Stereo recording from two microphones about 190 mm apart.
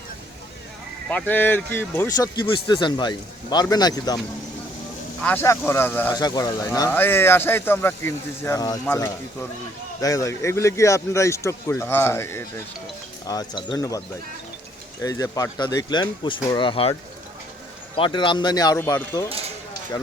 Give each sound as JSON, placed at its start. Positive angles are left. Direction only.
{"t": 1.1, "sound": "speech", "side_deg": 10}
{"t": 5.2, "sound": "speech", "side_deg": 10}
{"t": 15.0, "sound": "speech", "side_deg": 15}
{"t": 17.9, "sound": "speech", "side_deg": 25}
{"t": 18.8, "sound": "speech", "side_deg": 10}